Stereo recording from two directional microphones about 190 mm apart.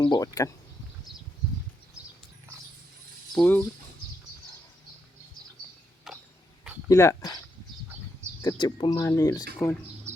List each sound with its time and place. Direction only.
0.0 s speech: 20° left (ahead or behind)
3.3 s speech: 5° left (ahead or behind)
6.1 s a sound: centre (ahead or behind)
6.8 s speech: 15° left (ahead or behind)
8.4 s speech: 25° left (ahead or behind)
10.1 s bird: 15° right (ahead or behind)